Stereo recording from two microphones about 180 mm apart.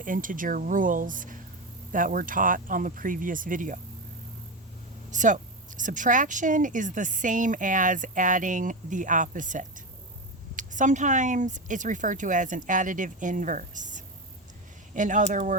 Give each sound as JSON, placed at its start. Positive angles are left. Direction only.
{"t": 0.0, "sound": "speech", "side_deg": -50}
{"t": 5.1, "sound": "speech", "side_deg": -45}